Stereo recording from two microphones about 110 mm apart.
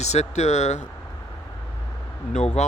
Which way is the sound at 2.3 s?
90° left.